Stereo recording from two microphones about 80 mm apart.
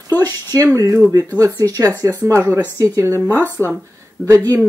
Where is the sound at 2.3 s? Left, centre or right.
Right.